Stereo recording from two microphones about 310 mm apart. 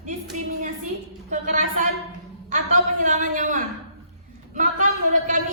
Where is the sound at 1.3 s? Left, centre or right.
Right.